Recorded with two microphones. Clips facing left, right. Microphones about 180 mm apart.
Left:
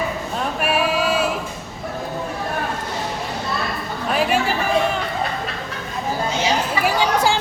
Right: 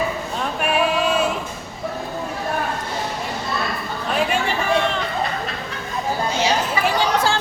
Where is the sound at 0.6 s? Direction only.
5° left (ahead or behind).